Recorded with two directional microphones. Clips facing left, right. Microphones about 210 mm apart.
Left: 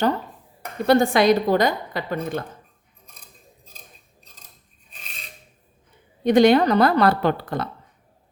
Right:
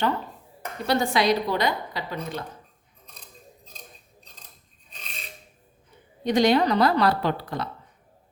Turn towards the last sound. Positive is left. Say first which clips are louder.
# left 5 dB
turn(degrees=55)  # may be behind; listen again after turning